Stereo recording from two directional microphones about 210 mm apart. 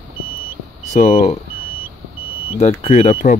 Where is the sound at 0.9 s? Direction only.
35° left (ahead or behind).